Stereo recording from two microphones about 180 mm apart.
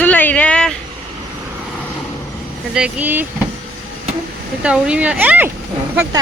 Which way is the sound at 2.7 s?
5° right (ahead or behind).